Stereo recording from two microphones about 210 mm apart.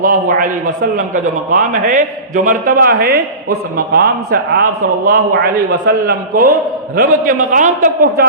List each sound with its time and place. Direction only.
0.0 s a man's voice: 40° right (ahead or behind)